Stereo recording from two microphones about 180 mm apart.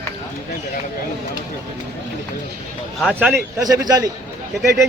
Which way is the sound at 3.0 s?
5° right (ahead or behind).